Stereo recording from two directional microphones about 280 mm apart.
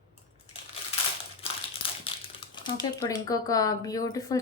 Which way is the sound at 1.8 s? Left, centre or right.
Centre.